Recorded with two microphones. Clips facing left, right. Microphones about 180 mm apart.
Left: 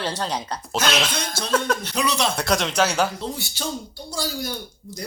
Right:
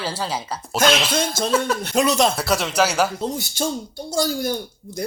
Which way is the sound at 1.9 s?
45° right (ahead or behind).